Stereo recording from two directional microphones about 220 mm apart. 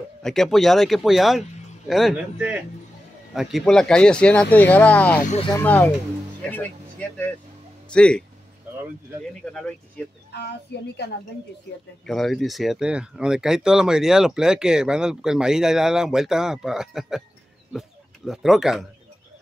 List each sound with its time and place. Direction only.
0.2 s a man's voice: centre (ahead or behind)
9.4 s speech: 5° left (ahead or behind)
10.7 s a woman's voice: 50° left (ahead or behind)
12.1 s speech: centre (ahead or behind)